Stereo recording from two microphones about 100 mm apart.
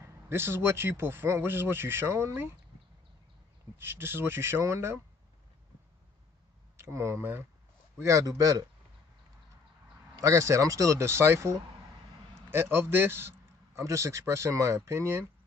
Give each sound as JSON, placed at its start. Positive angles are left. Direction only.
{"t": 0.0, "sound": "speech", "side_deg": -25}
{"t": 3.7, "sound": "speech", "side_deg": -25}
{"t": 6.8, "sound": "speech", "side_deg": -30}
{"t": 10.1, "sound": "speech", "side_deg": -30}